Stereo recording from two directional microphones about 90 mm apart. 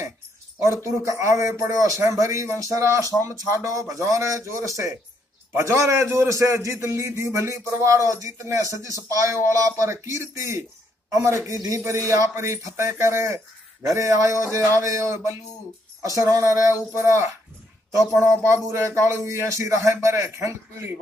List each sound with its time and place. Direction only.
0.8 s a man's voice: 35° right (ahead or behind)